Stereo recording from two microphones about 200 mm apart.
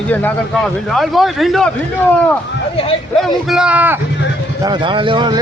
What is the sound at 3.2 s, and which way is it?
Speech, 5° right (ahead or behind).